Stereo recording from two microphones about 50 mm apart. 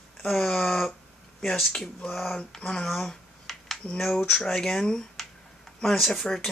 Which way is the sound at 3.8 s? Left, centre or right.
Centre.